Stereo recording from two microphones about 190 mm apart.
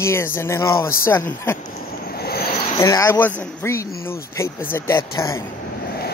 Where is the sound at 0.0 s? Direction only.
15° left (ahead or behind).